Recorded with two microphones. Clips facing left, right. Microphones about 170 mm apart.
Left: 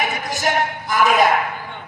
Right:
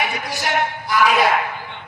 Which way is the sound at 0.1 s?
45° left (ahead or behind).